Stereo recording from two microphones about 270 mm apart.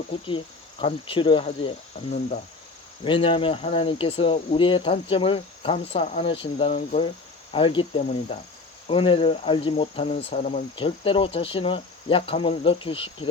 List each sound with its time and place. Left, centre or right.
0.3 s speech: centre
3.0 s speech: centre